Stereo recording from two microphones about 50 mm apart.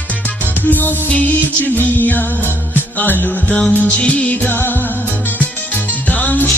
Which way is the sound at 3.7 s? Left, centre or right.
Left.